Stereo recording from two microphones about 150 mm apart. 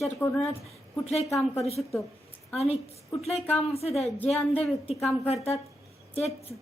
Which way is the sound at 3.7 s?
40° left (ahead or behind).